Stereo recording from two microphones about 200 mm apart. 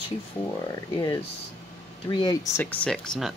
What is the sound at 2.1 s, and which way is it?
Speech, 20° left (ahead or behind).